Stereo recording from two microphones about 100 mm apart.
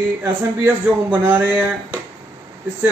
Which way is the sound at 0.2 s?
20° right (ahead or behind).